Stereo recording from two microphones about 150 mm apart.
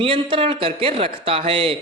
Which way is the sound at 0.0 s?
35° right (ahead or behind).